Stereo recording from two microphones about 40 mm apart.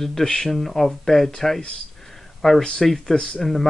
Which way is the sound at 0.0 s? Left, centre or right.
Centre.